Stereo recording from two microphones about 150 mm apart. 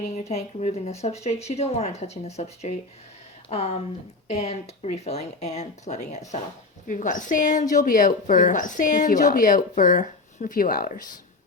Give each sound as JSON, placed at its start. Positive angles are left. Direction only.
{"t": 0.1, "sound": "speech", "side_deg": 45}